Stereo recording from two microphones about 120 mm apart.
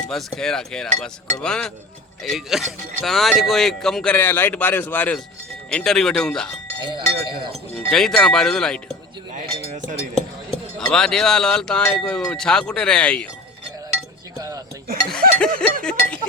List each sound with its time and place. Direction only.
0.1 s speech: 5° left (ahead or behind)
5.7 s speech: 5° left (ahead or behind)
6.9 s speech: 40° right (ahead or behind)
7.9 s speech: 5° left (ahead or behind)
10.8 s speech: 5° left (ahead or behind)
14.3 s a sound: 30° right (ahead or behind)
15.1 s a sound: 5° left (ahead or behind)